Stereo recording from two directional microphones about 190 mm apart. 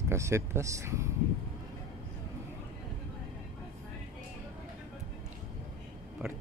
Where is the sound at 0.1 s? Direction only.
15° right (ahead or behind).